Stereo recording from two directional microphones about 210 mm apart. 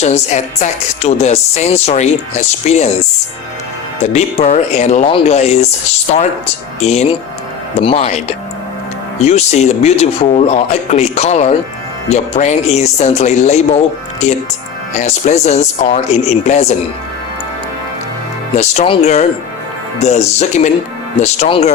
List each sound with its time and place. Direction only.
0.0 s speech: 35° left (ahead or behind)
4.0 s speech: 30° left (ahead or behind)
6.7 s speech: 30° left (ahead or behind)
18.5 s speech: 35° left (ahead or behind)